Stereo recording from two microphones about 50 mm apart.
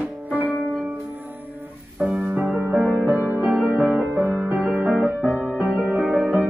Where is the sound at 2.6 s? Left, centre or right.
Right.